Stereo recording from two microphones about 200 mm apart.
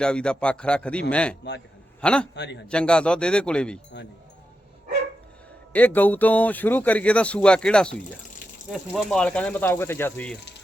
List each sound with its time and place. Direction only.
0.0 s speech: 5° left (ahead or behind)
2.3 s a man's voice: 60° left (ahead or behind)
2.6 s speech: 5° left (ahead or behind)
5.7 s speech: 10° left (ahead or behind)